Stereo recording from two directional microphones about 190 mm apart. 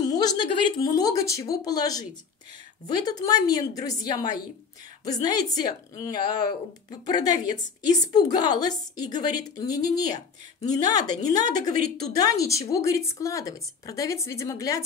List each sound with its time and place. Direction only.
0.0 s a woman's voice: 20° left (ahead or behind)